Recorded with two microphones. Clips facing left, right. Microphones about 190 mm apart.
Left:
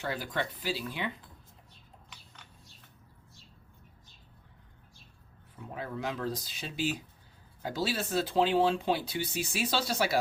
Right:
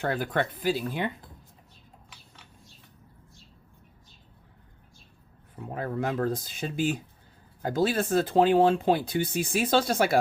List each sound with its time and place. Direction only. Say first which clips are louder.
0.0 s speech: right 6 dB; 55° right (ahead or behind)
2.0 s a sound: right 1 dB; centre (ahead or behind)
5.5 s speech: right 7 dB; 50° right (ahead or behind)